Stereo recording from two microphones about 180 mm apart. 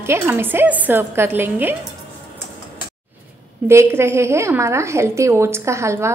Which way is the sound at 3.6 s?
15° right (ahead or behind).